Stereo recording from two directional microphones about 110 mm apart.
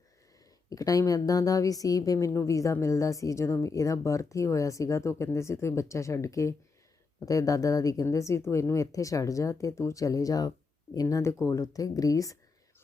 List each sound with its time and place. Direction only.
0.7 s a woman's voice: 30° left (ahead or behind)